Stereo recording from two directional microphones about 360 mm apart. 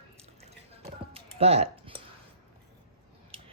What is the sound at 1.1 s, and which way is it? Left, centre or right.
Typing, centre.